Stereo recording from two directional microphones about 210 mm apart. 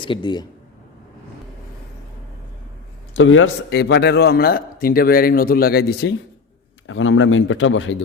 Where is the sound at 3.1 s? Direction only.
65° left (ahead or behind).